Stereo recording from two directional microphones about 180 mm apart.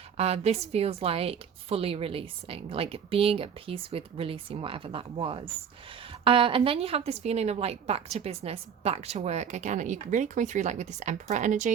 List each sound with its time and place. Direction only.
0.2 s a woman's voice: 35° right (ahead or behind)